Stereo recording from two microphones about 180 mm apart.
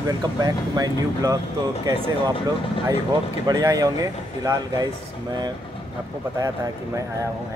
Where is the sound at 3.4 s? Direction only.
20° right (ahead or behind).